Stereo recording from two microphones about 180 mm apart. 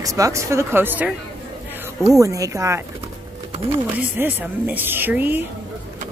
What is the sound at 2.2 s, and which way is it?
Speech, 15° right (ahead or behind).